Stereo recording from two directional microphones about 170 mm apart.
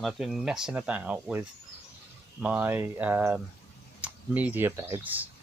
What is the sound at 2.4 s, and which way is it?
Speech, 10° right (ahead or behind).